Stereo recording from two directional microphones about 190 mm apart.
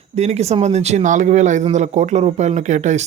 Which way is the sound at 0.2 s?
35° right (ahead or behind).